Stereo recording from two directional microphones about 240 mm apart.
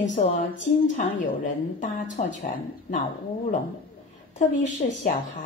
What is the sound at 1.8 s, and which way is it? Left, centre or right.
Speech, left.